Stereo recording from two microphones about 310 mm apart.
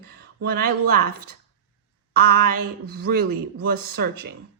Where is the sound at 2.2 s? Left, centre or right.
Right.